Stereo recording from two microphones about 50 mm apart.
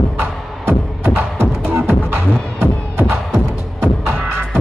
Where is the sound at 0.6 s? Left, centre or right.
Right.